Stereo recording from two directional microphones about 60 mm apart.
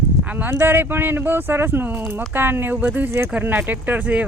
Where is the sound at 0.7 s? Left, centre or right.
Right.